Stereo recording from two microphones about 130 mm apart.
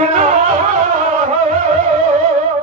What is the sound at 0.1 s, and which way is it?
Music, 55° right (ahead or behind).